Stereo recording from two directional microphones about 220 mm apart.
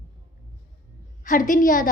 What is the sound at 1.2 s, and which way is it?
Speech, 35° left (ahead or behind).